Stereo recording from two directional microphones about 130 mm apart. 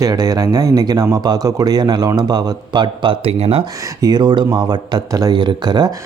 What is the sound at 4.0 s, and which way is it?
Speech, 30° right (ahead or behind).